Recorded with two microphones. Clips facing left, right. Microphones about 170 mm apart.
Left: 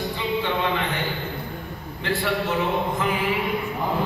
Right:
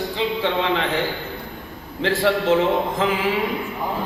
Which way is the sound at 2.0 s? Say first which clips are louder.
Right 6 dB; 90° right.